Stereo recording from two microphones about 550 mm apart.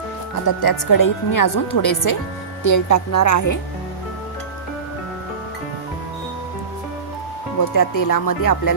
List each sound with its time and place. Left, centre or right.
0.6 s speech: left
7.6 s speech: left